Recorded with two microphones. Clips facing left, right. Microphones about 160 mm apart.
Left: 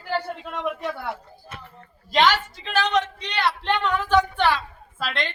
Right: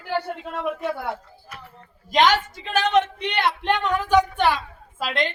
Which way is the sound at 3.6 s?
15° right (ahead or behind).